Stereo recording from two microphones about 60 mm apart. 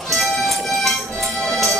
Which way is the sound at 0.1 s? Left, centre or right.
Centre.